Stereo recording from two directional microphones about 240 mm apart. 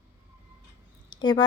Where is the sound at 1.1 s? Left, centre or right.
Centre.